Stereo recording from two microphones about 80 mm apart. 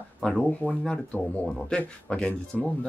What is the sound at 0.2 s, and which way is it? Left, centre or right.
Speech, centre.